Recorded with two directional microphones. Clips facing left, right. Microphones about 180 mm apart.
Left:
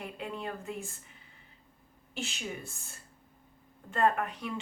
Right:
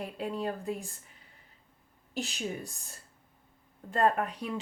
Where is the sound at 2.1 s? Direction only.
40° right (ahead or behind).